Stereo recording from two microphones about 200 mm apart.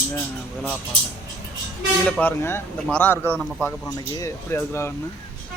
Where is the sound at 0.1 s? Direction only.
10° left (ahead or behind).